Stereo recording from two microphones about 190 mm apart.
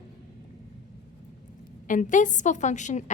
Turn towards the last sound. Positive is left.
turn(degrees=40)  # may be behind; listen again after turning